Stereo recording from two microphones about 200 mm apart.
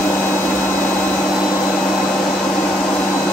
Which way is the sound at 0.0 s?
10° left (ahead or behind).